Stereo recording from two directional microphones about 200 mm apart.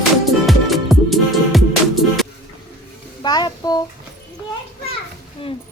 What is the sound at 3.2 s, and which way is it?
Child singing, 20° left (ahead or behind).